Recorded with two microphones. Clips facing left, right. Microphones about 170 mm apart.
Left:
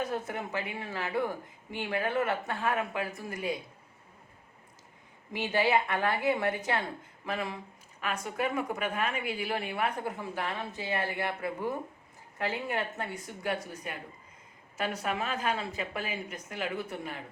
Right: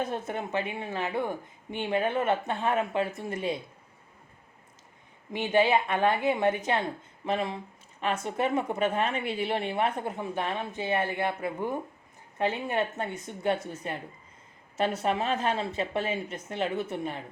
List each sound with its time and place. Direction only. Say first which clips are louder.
0.0 s a woman's voice: right 2 dB; 25° right (ahead or behind)
5.3 s a woman's voice: right 4 dB; 20° right (ahead or behind)